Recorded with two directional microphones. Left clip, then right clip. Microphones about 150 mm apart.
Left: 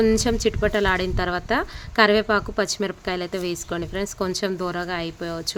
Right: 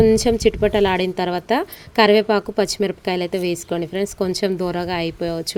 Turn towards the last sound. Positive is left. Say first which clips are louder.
# right 6 dB
turn(degrees=-20)  # may be behind; listen again after turning